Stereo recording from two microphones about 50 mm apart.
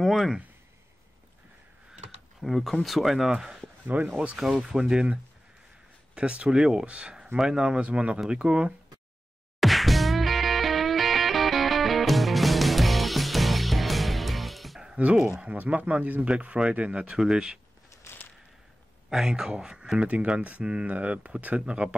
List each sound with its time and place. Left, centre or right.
0.0 s speech: centre
2.4 s speech: centre
3.6 s a sound: right
4.2 s speech: right
4.5 s speech: centre
6.1 s speech: right
9.6 s music: centre
15.2 s speech: right
18.1 s a sound: left
19.0 s speech: centre